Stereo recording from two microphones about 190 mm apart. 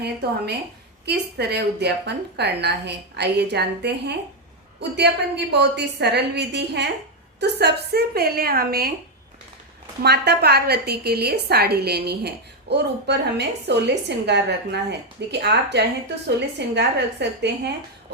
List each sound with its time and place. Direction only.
0.0 s a woman's voice: 60° right (ahead or behind)
10.0 s a woman's voice: 60° right (ahead or behind)